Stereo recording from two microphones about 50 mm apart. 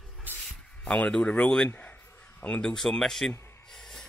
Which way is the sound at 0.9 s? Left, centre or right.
Left.